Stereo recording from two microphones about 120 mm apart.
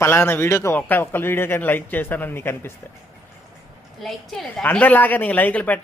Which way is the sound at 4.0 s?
Centre (ahead or behind).